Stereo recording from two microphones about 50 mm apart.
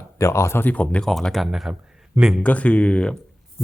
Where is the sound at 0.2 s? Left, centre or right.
Left.